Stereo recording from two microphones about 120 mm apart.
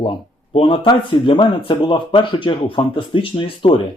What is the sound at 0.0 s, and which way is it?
Speech, 45° left (ahead or behind).